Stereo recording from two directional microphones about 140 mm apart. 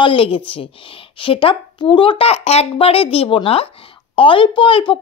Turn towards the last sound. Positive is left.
turn(degrees=40)  # may be behind; listen again after turning